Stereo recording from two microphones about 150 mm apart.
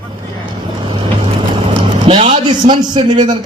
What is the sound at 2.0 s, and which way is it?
A man's voice, 40° right (ahead or behind).